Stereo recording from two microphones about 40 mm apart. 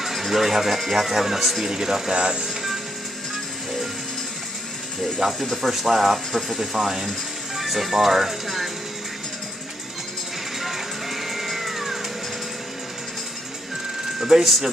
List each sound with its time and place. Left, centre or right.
0.0 s speech: centre
1.7 s speech: centre
5.2 s speech: centre
10.6 s music: centre
14.2 s speech: centre